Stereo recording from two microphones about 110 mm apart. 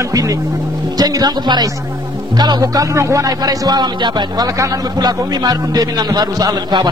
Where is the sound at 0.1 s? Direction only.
30° right (ahead or behind).